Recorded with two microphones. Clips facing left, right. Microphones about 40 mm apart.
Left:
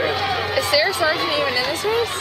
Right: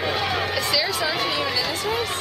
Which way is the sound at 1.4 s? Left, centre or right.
Centre.